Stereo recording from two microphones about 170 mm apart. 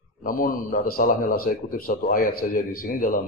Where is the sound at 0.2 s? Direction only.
55° left (ahead or behind).